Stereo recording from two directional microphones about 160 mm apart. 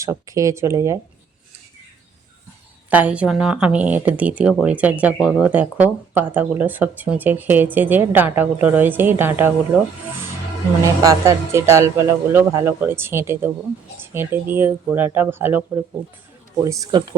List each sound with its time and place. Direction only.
0.0 s speech: 20° right (ahead or behind)
2.9 s speech: 10° right (ahead or behind)
10.8 s speech: 20° right (ahead or behind)
16.8 s speech: 30° right (ahead or behind)